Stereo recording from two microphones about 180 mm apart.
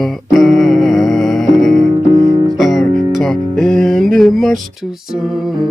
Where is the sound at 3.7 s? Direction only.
Centre (ahead or behind).